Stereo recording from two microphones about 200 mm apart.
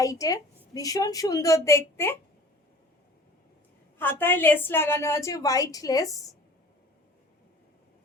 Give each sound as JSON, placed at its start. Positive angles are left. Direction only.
{"t": 0.0, "sound": "a woman's voice", "side_deg": 15}
{"t": 3.9, "sound": "a woman's voice", "side_deg": 10}